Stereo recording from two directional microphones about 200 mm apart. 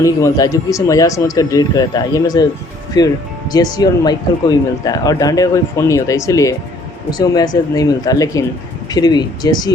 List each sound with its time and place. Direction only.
0.0 s speech: 15° left (ahead or behind)